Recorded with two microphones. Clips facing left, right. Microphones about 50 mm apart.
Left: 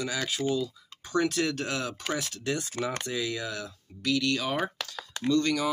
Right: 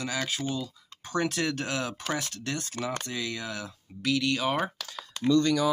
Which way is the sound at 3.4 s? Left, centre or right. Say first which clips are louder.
Left 1 dB; centre.